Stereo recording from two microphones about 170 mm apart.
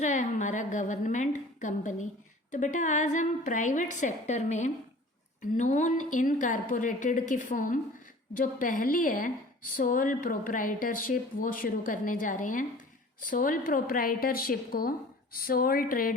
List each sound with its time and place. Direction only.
0.0 s a woman's voice: 45° left (ahead or behind)